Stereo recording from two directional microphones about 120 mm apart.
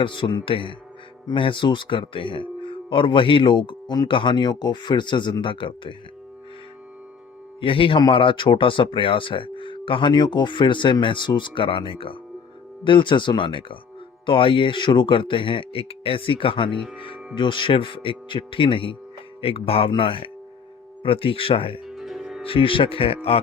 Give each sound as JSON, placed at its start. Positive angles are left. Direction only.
{"t": 0.0, "sound": "speech", "side_deg": 45}
{"t": 7.6, "sound": "speech", "side_deg": 45}
{"t": 21.8, "sound": "music", "side_deg": 0}
{"t": 22.4, "sound": "speech", "side_deg": 50}